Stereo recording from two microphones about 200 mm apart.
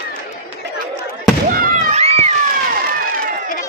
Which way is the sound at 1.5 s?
45° right (ahead or behind).